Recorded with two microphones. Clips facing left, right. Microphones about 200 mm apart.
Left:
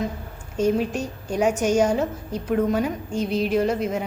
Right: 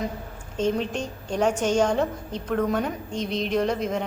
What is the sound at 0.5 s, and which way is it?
A woman's voice, 10° left (ahead or behind).